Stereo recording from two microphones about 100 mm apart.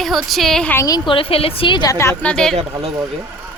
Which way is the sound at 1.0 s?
65° left (ahead or behind).